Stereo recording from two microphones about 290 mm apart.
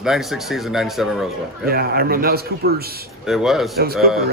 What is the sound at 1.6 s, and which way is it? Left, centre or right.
A man's voice, right.